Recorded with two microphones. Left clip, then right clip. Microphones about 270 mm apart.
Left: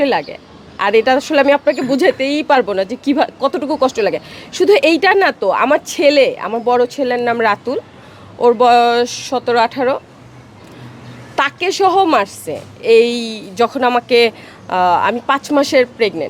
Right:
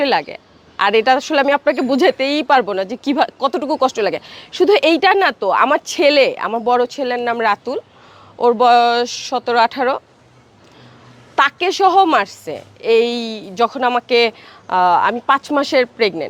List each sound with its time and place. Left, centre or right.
0.0 s speech: right
11.3 s speech: right